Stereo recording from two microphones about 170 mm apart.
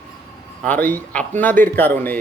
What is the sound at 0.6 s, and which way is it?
A man's voice, 10° left (ahead or behind).